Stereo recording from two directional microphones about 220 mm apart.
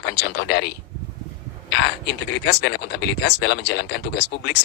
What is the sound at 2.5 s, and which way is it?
Speech, 50° left (ahead or behind).